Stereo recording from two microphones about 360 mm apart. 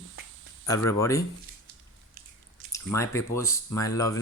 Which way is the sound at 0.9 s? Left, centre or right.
Centre.